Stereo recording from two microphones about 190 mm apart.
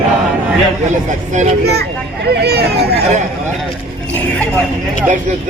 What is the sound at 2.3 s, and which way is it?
Speech, 60° right (ahead or behind).